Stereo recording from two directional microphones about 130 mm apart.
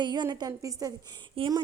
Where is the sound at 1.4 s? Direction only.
45° right (ahead or behind).